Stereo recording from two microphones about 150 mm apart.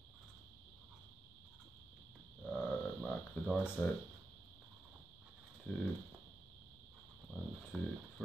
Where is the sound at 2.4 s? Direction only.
5° left (ahead or behind).